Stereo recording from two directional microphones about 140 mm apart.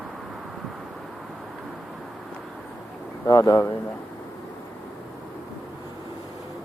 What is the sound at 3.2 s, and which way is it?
Speech, 25° left (ahead or behind).